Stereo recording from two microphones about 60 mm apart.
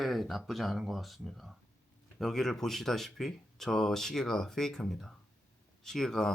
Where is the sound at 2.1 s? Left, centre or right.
Centre.